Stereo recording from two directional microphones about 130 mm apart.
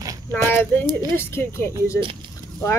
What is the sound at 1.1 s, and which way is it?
Speech, 20° left (ahead or behind).